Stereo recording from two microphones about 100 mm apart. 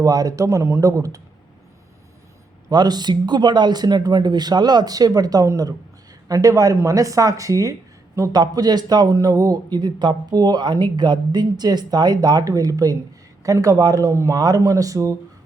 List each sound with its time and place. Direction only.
0.0 s speech: 35° right (ahead or behind)
2.6 s speech: 45° right (ahead or behind)